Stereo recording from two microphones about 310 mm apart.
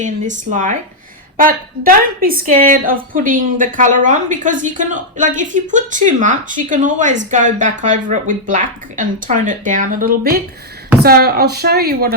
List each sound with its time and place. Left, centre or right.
0.0 s a woman's voice: right